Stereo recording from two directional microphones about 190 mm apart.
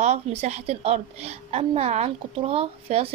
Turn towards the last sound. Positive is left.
turn(degrees=-30)  # may be behind; listen again after turning